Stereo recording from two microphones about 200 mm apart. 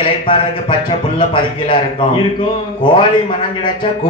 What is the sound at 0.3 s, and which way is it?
A man's voice, 25° left (ahead or behind).